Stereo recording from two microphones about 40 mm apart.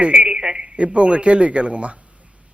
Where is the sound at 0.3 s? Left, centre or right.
Centre.